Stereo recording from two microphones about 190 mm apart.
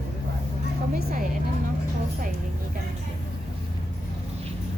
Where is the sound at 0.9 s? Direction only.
55° right (ahead or behind).